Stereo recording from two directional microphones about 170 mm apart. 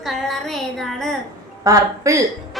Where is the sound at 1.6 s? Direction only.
20° right (ahead or behind).